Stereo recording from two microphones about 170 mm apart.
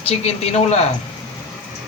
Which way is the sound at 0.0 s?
35° left (ahead or behind).